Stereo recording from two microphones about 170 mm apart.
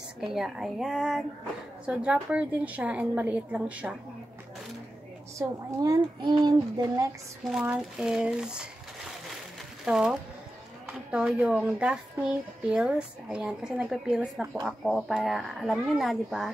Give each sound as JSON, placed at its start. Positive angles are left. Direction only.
{"t": 0.2, "sound": "a woman's voice", "side_deg": 0}
{"t": 5.4, "sound": "a child's voice", "side_deg": -20}
{"t": 7.4, "sound": "speech", "side_deg": -5}
{"t": 9.8, "sound": "a woman's voice", "side_deg": -5}